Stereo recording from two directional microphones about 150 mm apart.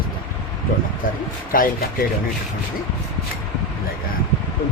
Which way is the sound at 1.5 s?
70° left (ahead or behind).